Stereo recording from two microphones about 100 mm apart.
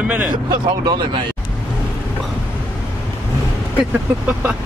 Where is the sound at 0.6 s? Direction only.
45° right (ahead or behind).